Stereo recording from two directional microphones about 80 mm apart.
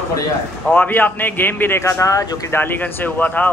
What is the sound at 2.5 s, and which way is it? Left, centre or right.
Speech, left.